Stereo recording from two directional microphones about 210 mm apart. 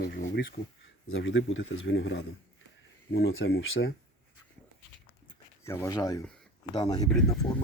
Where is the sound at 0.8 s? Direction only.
65° left (ahead or behind).